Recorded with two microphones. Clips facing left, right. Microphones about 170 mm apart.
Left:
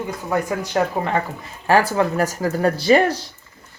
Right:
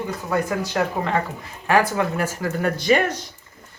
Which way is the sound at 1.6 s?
35° left (ahead or behind).